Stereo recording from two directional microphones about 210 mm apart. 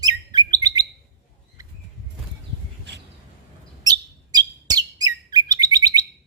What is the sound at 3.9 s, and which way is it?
Bird, 20° right (ahead or behind).